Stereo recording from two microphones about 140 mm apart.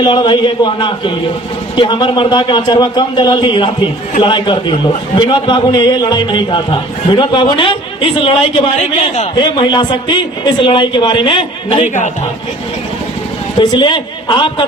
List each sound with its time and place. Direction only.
0.0 s a man's voice: 35° left (ahead or behind)
8.8 s a man's voice: 55° left (ahead or behind)
9.3 s a man's voice: 35° left (ahead or behind)
13.6 s a man's voice: 35° left (ahead or behind)